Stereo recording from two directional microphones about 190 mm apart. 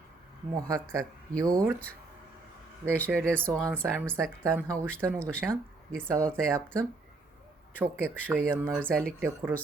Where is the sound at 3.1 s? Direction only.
5° left (ahead or behind).